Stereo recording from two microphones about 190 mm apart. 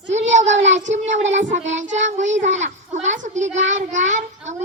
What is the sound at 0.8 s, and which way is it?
A child's voice, 40° right (ahead or behind).